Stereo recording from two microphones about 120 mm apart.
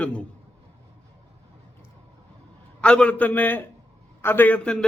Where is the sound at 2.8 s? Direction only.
10° left (ahead or behind).